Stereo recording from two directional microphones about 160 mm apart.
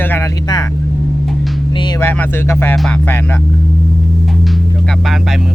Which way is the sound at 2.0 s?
15° left (ahead or behind).